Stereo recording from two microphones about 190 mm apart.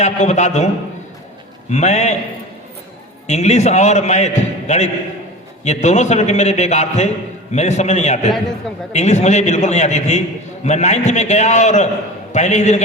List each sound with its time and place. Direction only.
0.0 s a man's voice: 40° left (ahead or behind)
1.7 s a man's voice: 35° left (ahead or behind)
3.2 s a man's voice: 35° left (ahead or behind)